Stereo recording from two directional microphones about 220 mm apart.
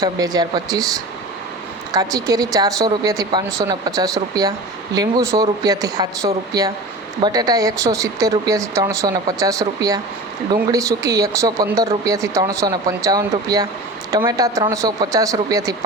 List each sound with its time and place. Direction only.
0.0 s speech: 15° right (ahead or behind)